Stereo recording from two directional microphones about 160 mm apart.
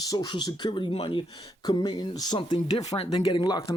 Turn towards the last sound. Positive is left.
turn(degrees=25)  # may be behind; listen again after turning